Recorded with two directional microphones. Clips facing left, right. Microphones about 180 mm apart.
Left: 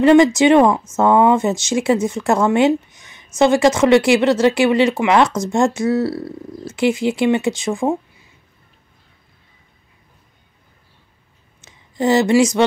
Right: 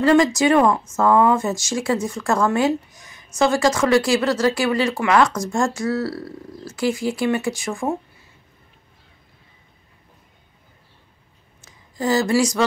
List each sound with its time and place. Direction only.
0.0 s speech: 20° left (ahead or behind)
11.6 s speech: 25° left (ahead or behind)